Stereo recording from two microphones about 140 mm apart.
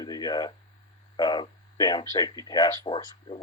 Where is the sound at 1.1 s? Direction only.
30° left (ahead or behind).